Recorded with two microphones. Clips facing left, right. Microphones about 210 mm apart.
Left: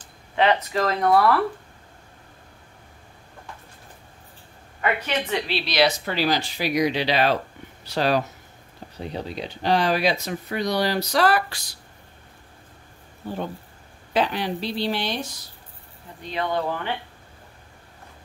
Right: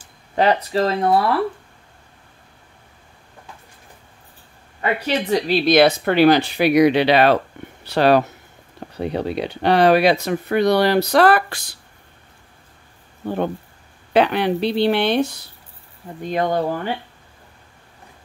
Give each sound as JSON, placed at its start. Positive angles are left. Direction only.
{"t": 0.4, "sound": "speech", "side_deg": -35}
{"t": 5.0, "sound": "speech", "side_deg": -40}
{"t": 14.1, "sound": "speech", "side_deg": -65}
{"t": 16.2, "sound": "speech", "side_deg": -45}